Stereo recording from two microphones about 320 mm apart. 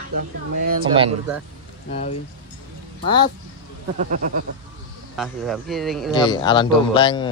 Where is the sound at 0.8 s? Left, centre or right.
Centre.